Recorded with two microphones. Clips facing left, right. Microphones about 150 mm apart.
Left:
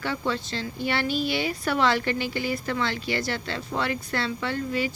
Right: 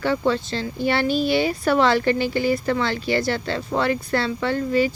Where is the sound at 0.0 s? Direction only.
35° right (ahead or behind).